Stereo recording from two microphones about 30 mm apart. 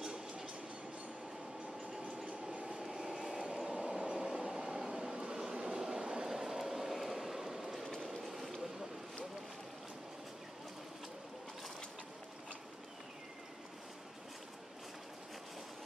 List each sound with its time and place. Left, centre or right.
0.0 s train: centre
2.2 s train: right
2.8 s train: centre; by 6.3 s right
6.3 s vehicle: centre
7.8 s boat: centre